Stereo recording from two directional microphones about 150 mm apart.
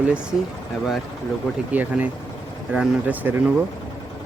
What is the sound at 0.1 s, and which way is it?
Speech, 5° right (ahead or behind).